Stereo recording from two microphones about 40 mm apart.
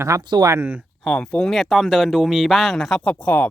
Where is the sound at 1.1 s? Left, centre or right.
Left.